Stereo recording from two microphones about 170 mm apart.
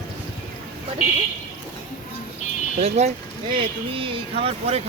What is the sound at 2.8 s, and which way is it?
Speech, 40° right (ahead or behind).